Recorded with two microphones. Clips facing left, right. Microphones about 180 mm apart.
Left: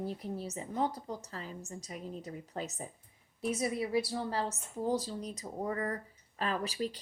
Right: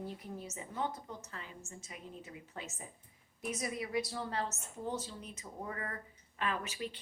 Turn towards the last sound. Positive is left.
turn(degrees=35)  # may be behind; listen again after turning